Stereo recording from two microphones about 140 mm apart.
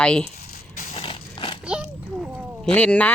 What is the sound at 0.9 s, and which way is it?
Dog, 40° left (ahead or behind).